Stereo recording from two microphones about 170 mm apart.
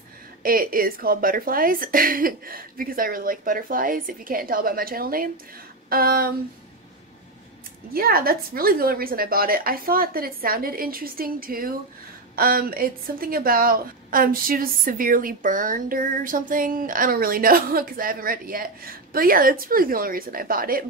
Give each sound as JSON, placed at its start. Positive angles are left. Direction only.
{"t": 0.4, "sound": "a woman's voice", "side_deg": -55}
{"t": 7.9, "sound": "a woman's voice", "side_deg": -60}